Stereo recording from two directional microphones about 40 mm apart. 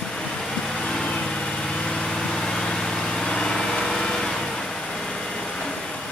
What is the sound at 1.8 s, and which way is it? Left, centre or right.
Vehicle, centre.